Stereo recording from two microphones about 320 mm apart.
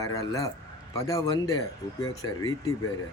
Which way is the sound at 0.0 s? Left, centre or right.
Centre.